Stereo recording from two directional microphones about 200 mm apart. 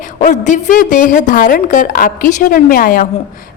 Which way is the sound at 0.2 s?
40° left (ahead or behind).